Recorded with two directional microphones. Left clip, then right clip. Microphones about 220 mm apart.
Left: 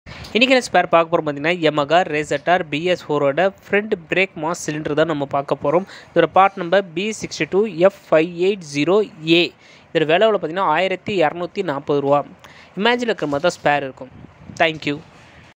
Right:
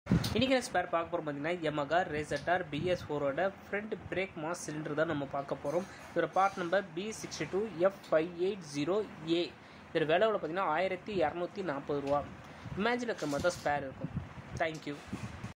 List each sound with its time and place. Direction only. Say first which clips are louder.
0.3 s speech: left 17 dB; 35° left (ahead or behind)